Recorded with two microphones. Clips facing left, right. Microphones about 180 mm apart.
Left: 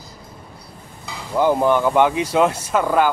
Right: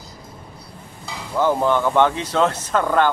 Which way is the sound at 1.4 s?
15° left (ahead or behind).